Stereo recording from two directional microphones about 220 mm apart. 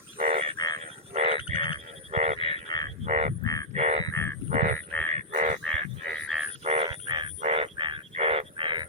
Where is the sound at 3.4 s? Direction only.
15° left (ahead or behind).